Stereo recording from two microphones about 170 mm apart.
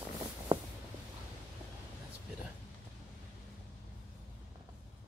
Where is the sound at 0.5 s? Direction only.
30° right (ahead or behind).